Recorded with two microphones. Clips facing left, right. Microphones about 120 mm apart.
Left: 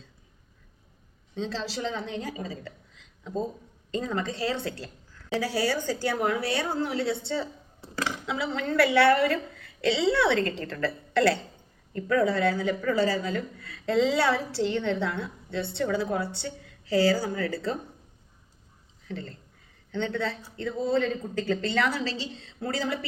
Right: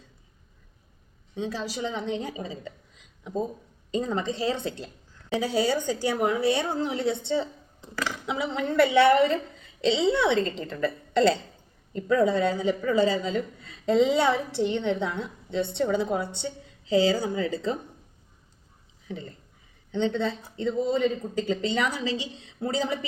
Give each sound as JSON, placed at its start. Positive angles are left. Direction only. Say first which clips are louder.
{"t": 1.4, "sound": "speech", "louder": "right 1 dB", "side_deg": -15}
{"t": 19.0, "sound": "speech", "louder": "even", "side_deg": -15}